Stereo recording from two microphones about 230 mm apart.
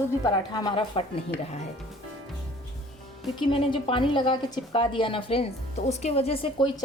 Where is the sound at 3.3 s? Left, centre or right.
Left.